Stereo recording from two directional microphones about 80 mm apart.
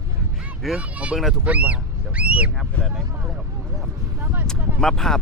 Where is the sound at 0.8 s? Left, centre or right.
Centre.